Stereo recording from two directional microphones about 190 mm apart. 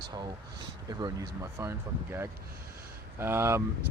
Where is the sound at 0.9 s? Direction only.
20° right (ahead or behind).